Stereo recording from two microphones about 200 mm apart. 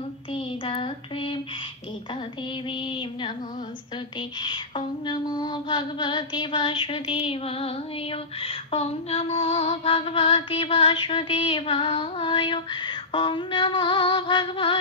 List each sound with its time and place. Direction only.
0.3 s child singing: 30° left (ahead or behind)
2.7 s female singing: 25° left (ahead or behind)
4.4 s female singing: 25° left (ahead or behind)